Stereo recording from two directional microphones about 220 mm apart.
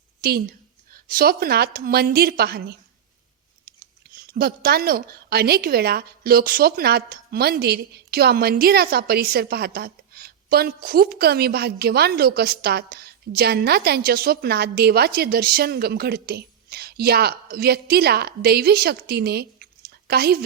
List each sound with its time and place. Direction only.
0.2 s a woman's voice: 45° right (ahead or behind)